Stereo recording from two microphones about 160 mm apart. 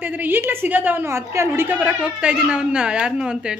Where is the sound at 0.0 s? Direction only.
10° right (ahead or behind).